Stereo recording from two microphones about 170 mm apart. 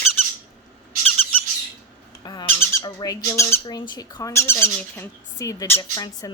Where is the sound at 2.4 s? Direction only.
15° left (ahead or behind).